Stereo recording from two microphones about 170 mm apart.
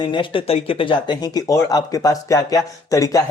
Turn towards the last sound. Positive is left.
turn(degrees=20)  # may be behind; listen again after turning